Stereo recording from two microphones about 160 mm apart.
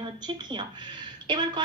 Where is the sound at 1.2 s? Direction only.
30° right (ahead or behind).